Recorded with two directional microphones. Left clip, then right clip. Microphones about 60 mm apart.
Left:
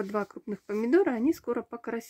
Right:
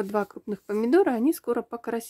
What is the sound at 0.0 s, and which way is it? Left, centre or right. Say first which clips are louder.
Speech: right 4 dB; centre.